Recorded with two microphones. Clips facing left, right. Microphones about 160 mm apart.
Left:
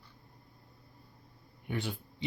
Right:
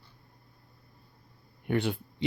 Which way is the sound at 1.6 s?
65° right (ahead or behind).